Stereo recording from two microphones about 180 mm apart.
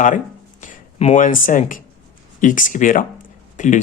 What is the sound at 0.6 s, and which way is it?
Speech, 40° left (ahead or behind).